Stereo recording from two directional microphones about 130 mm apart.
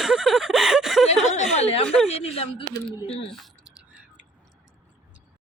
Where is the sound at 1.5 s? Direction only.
55° left (ahead or behind).